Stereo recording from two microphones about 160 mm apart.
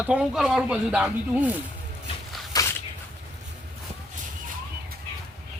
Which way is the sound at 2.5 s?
25° left (ahead or behind).